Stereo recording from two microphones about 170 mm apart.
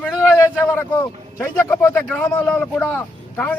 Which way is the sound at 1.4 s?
10° left (ahead or behind).